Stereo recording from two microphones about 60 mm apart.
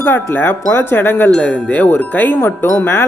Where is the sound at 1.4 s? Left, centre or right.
Left.